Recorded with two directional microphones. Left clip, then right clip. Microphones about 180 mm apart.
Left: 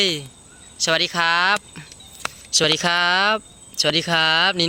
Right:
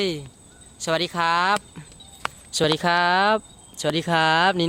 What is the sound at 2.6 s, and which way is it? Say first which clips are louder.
Speech: left 2 dB; 10° right (ahead or behind).